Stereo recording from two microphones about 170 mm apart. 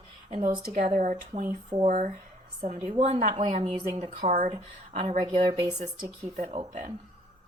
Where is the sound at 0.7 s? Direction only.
45° right (ahead or behind); by 4.3 s 30° right (ahead or behind).